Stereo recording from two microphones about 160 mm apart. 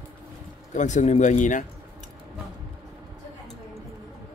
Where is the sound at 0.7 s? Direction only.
50° left (ahead or behind).